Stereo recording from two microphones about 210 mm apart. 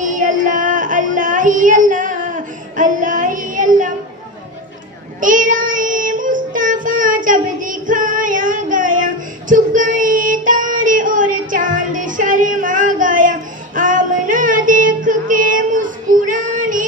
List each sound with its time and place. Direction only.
0.0 s child singing: 40° right (ahead or behind)
5.2 s child singing: 40° right (ahead or behind)